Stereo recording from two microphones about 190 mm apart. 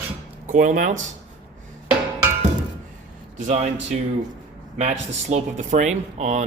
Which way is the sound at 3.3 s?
40° right (ahead or behind).